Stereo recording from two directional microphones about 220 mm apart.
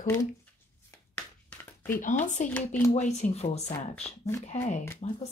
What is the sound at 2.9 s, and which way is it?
A woman's voice, 30° left (ahead or behind).